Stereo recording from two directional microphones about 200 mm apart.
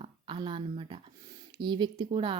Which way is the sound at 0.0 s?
25° right (ahead or behind).